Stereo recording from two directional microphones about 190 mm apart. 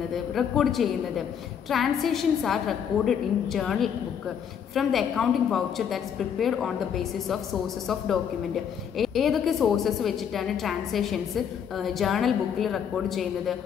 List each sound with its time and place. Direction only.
0.1 s a woman's voice: centre (ahead or behind)
8.9 s a woman's voice: centre (ahead or behind)